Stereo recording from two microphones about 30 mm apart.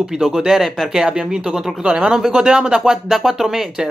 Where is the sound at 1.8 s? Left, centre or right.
Right.